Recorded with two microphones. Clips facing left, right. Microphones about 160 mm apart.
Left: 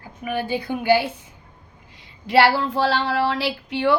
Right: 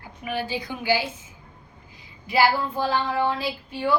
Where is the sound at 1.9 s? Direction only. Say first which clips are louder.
Left 5 dB; 75° left (ahead or behind).